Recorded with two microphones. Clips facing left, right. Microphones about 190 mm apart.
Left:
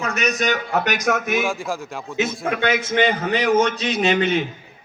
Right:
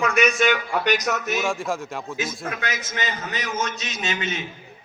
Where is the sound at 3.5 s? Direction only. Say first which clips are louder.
Left 10 dB; 35° left (ahead or behind).